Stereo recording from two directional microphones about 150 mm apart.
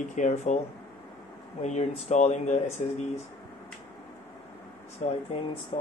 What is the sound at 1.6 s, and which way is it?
Speech, 50° left (ahead or behind).